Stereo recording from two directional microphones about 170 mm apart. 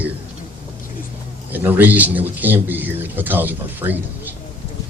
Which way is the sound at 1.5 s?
10° right (ahead or behind).